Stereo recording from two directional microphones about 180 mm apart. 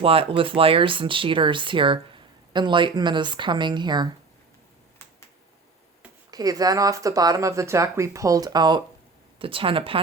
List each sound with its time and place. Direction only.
0.0 s speech: 30° right (ahead or behind)
6.3 s speech: 20° right (ahead or behind)